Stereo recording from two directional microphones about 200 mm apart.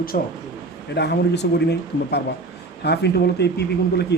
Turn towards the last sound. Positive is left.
turn(degrees=55)  # may be behind; listen again after turning